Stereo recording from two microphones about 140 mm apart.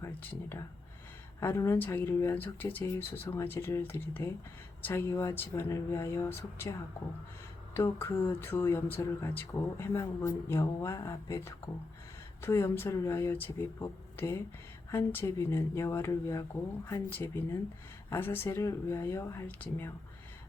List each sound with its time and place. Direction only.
0.0 s speech: 15° left (ahead or behind)